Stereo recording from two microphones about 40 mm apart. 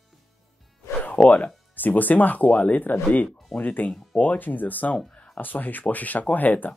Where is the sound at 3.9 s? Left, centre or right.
Left.